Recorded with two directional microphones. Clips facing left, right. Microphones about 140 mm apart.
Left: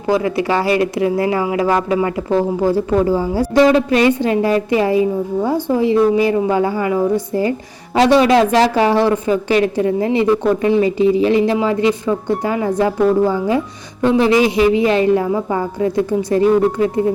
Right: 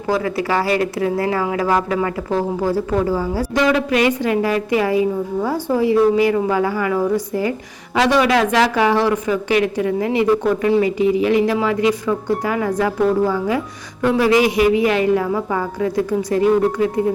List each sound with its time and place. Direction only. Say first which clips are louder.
0.1 s speech: left 3 dB; 20° left (ahead or behind)